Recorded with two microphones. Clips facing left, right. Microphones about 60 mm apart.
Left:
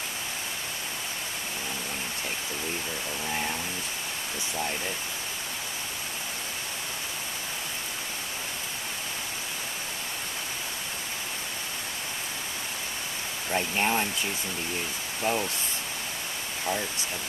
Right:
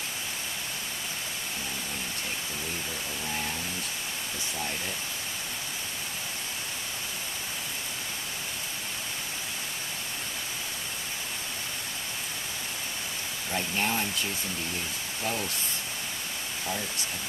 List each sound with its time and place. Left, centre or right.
13.5 s speech: left
15.2 s speech: left